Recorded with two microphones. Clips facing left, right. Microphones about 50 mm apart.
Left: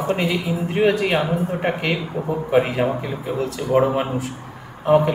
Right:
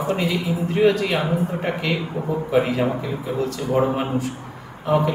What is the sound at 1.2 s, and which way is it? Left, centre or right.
Speech, centre.